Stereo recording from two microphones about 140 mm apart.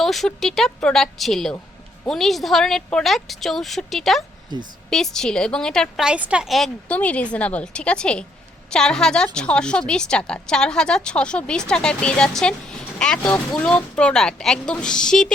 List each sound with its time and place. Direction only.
0.0 s a woman's voice: centre (ahead or behind)
4.5 s a woman's voice: 30° right (ahead or behind)
4.9 s a woman's voice: 5° left (ahead or behind)
6.1 s a woman's voice: 10° right (ahead or behind)